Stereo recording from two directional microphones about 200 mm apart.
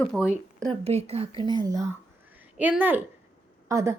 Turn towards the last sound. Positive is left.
turn(degrees=-15)  # may be behind; listen again after turning